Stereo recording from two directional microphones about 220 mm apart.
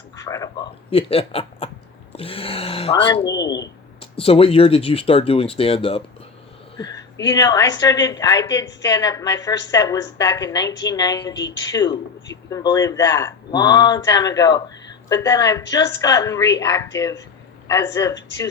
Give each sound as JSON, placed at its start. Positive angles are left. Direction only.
{"t": 0.3, "sound": "a woman's voice", "side_deg": 15}
{"t": 0.9, "sound": "a woman's voice", "side_deg": 25}